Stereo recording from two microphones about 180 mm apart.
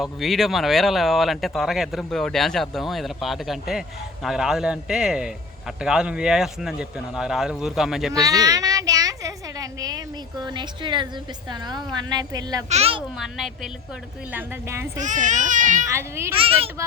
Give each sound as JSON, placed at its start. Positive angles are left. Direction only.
{"t": 0.0, "sound": "speech", "side_deg": 0}
{"t": 8.2, "sound": "a child's voice", "side_deg": -20}
{"t": 12.6, "sound": "a child's voice", "side_deg": -35}
{"t": 13.1, "sound": "speech", "side_deg": 0}
{"t": 14.3, "sound": "speech", "side_deg": -10}
{"t": 14.9, "sound": "a child's voice", "side_deg": -45}
{"t": 16.0, "sound": "speech", "side_deg": -15}
{"t": 16.3, "sound": "a child's voice", "side_deg": -30}